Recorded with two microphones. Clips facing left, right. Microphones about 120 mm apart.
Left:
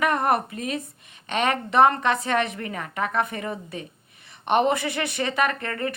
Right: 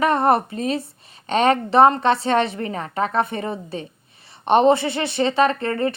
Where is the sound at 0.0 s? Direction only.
30° right (ahead or behind).